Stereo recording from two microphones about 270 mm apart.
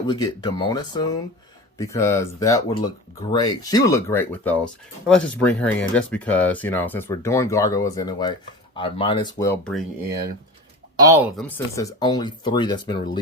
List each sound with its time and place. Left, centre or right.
0.1 s speech: centre
10.9 s speech: centre
11.4 s speech: centre